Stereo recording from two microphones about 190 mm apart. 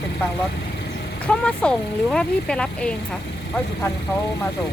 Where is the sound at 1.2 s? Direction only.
5° left (ahead or behind).